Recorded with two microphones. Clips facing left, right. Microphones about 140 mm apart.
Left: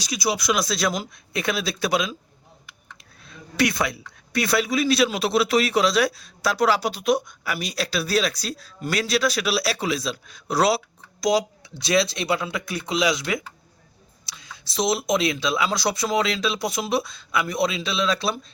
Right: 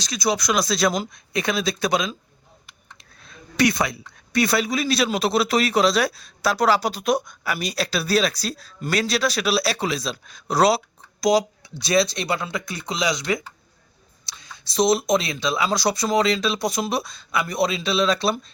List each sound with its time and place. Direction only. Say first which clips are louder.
0.0 s speech: right 2 dB; 10° left (ahead or behind)
3.6 s speech: right 2 dB; centre (ahead or behind)
6.9 s a woman's voice: even; 45° right (ahead or behind)
7.5 s speech: right 1 dB; 5° left (ahead or behind)